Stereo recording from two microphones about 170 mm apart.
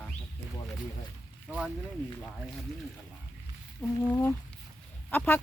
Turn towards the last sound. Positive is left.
turn(degrees=10)  # may be behind; listen again after turning